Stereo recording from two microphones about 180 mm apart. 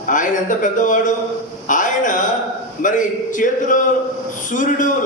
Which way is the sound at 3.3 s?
45° left (ahead or behind).